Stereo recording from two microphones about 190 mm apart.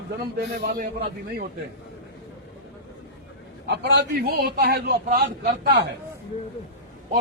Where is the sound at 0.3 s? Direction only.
55° right (ahead or behind).